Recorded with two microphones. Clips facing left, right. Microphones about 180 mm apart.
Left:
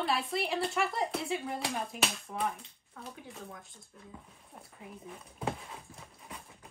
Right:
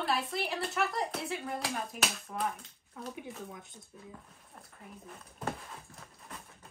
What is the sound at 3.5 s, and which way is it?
Speech, 20° right (ahead or behind).